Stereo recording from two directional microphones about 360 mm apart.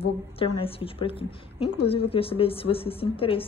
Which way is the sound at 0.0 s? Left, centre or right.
Centre.